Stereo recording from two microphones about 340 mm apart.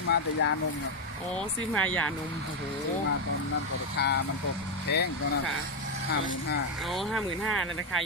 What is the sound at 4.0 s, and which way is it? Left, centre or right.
Speech, left.